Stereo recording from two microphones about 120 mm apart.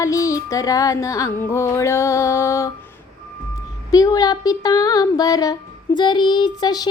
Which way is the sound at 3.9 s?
30° left (ahead or behind).